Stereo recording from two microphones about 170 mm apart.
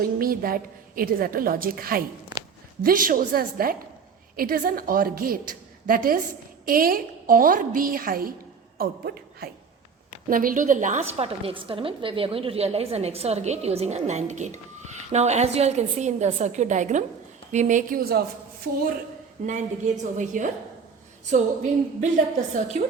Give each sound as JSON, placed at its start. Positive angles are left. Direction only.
{"t": 0.0, "sound": "a woman's voice", "side_deg": -60}
{"t": 19.5, "sound": "a woman's voice", "side_deg": -45}